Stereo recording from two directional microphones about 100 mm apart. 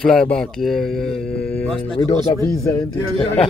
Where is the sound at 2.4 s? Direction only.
35° left (ahead or behind).